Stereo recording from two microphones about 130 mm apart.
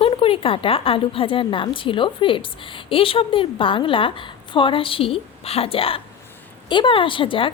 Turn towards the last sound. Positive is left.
turn(degrees=40)  # may be behind; listen again after turning